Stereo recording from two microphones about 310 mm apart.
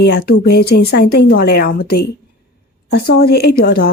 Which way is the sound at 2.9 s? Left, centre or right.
Left.